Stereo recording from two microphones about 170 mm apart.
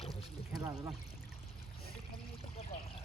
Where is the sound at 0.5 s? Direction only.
20° right (ahead or behind).